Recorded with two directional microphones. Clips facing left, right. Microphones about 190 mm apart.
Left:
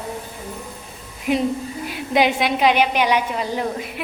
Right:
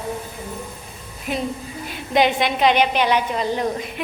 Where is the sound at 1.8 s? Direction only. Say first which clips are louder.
Even; 10° left (ahead or behind).